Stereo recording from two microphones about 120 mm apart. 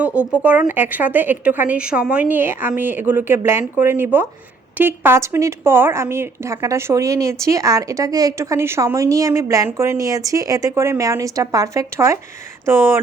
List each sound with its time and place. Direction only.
0.0 s a woman's voice: 10° right (ahead or behind)